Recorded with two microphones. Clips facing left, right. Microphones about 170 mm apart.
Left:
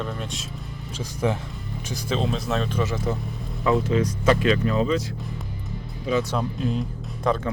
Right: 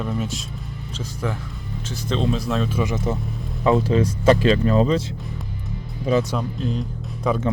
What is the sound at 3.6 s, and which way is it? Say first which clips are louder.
Speech: right 3 dB; 30° right (ahead or behind).